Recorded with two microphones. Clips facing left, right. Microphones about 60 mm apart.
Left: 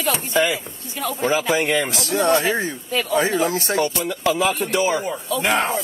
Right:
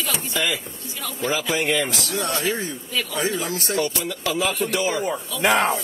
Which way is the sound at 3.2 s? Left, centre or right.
Left.